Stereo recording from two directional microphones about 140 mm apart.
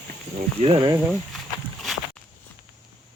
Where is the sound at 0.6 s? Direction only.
40° right (ahead or behind).